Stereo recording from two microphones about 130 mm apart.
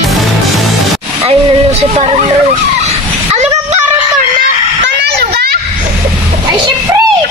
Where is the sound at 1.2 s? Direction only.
55° right (ahead or behind).